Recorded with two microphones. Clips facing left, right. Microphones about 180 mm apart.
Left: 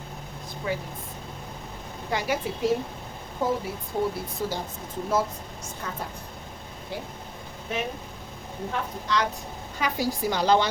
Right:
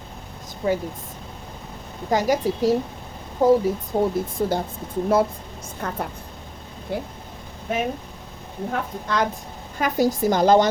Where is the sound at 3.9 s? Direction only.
45° right (ahead or behind).